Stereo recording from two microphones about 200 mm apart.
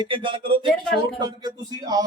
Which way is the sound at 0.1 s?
25° right (ahead or behind).